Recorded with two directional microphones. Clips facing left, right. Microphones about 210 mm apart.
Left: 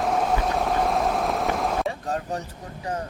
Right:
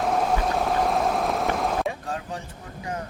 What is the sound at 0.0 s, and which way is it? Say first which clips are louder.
Train: even; centre (ahead or behind).